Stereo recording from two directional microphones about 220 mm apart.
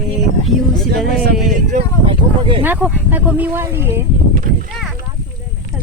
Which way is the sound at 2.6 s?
10° right (ahead or behind).